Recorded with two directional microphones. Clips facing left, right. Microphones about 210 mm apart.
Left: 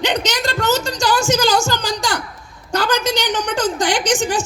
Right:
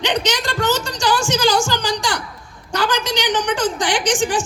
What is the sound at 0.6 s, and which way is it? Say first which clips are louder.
A man's voice: left 1 dB; 40° left (ahead or behind).